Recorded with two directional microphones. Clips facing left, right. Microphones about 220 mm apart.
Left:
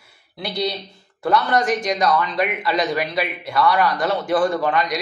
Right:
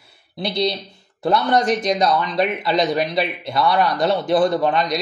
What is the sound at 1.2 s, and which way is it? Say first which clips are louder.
A man's voice: right 1 dB; 25° right (ahead or behind).